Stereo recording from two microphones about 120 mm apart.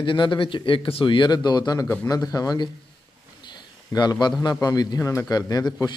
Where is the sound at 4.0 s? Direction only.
35° left (ahead or behind).